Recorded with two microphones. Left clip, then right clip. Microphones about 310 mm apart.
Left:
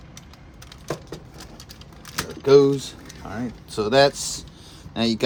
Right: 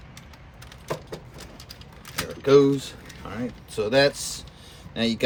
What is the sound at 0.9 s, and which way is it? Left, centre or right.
Vehicle, centre.